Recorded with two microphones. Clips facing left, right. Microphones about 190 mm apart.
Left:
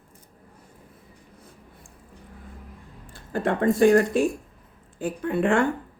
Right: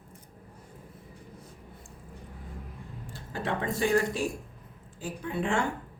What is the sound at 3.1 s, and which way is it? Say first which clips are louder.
Speech: left 7 dB; 50° left (ahead or behind).